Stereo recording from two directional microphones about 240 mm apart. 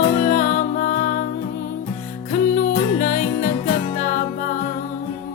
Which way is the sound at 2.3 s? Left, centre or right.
Left.